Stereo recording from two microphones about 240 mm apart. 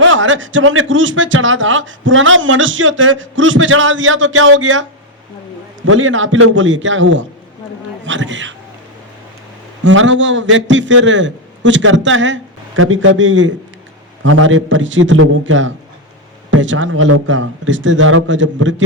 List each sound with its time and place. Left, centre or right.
0.0 s a man's voice: right
9.8 s a man's voice: right